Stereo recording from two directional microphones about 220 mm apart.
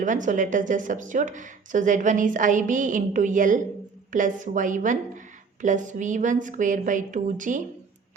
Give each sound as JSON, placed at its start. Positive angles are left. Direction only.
{"t": 0.0, "sound": "speech", "side_deg": -35}